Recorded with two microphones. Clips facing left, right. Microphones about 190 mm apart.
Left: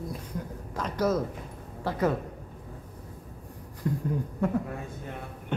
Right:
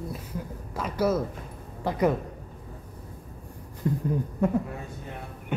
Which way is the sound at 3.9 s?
25° right (ahead or behind).